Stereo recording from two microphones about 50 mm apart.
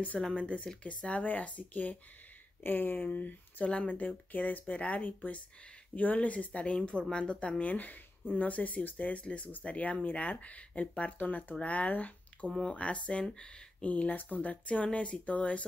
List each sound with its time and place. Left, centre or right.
0.3 s speech: left
13.8 s speech: left